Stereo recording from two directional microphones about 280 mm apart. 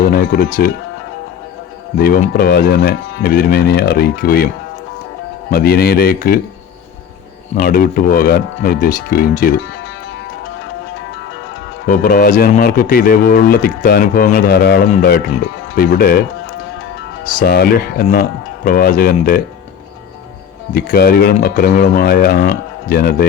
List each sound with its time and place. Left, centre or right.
0.0 s speech: left
2.0 s a man's voice: left
5.5 s a man's voice: left
7.5 s a man's voice: left
11.9 s a man's voice: left
17.2 s a man's voice: left
20.7 s a man's voice: left